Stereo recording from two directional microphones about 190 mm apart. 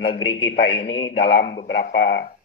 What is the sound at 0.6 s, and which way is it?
Speech, 25° left (ahead or behind).